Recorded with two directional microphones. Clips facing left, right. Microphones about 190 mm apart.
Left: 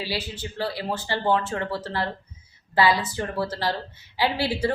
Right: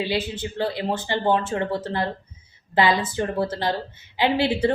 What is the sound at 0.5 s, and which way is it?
Speech, 20° right (ahead or behind).